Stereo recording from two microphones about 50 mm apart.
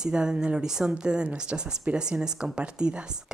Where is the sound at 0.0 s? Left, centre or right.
Centre.